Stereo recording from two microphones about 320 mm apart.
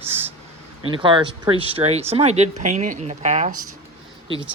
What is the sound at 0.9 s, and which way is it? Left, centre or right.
Speech, centre.